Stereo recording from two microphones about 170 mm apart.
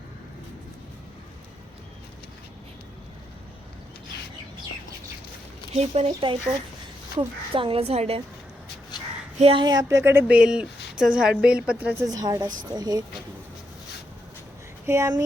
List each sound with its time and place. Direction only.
5.7 s a woman's voice: 40° right (ahead or behind)
9.4 s speech: 30° right (ahead or behind); by 12.0 s 10° right (ahead or behind)
12.0 s a woman's voice: 20° right (ahead or behind)
14.8 s speech: 15° right (ahead or behind)